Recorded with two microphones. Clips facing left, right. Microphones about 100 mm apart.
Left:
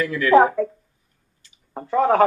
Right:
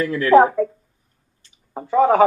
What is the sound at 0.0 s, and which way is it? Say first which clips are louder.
Speech: right 2 dB; 30° right (ahead or behind).